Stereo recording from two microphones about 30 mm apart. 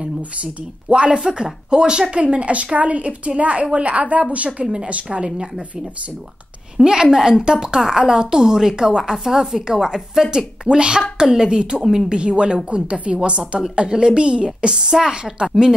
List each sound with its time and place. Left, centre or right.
0.4 s speech: right
1.2 s speech: right
6.9 s a woman's voice: right
14.9 s a woman's voice: centre